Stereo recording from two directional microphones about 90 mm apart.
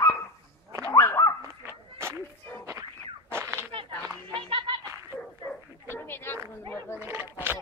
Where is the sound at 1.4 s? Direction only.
30° right (ahead or behind).